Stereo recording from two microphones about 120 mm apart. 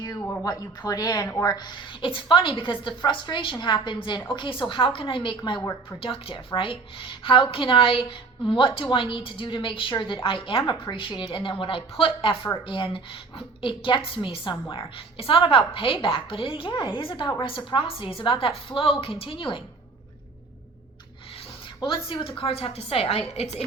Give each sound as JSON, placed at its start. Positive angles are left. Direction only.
{"t": 0.4, "sound": "a woman's voice", "side_deg": 35}
{"t": 21.8, "sound": "a woman's voice", "side_deg": 45}